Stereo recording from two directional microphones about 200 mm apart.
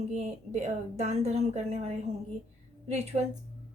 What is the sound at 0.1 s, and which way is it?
A woman's voice, 35° right (ahead or behind).